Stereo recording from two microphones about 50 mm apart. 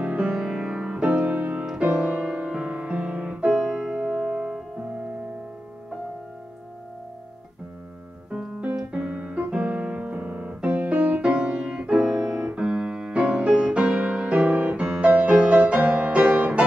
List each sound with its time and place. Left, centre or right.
0.0 s music: right
0.3 s music: centre
1.2 s music: right
1.8 s music: right
8.3 s piano: right
13.2 s music: right